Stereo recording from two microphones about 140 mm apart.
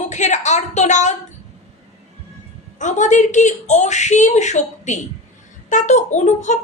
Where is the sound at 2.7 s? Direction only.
60° left (ahead or behind).